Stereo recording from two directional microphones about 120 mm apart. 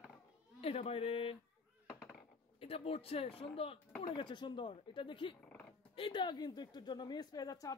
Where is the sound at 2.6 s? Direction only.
55° left (ahead or behind).